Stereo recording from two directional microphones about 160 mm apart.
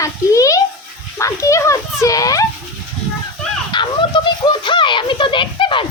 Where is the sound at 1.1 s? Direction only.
20° left (ahead or behind).